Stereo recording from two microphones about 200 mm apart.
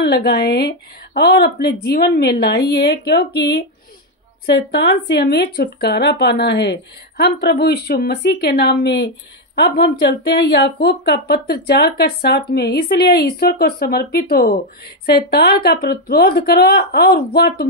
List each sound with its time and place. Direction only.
0.0 s a woman's voice: 55° left (ahead or behind)